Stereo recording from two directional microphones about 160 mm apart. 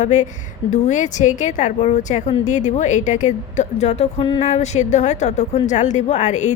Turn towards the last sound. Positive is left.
turn(degrees=45)  # may be behind; listen again after turning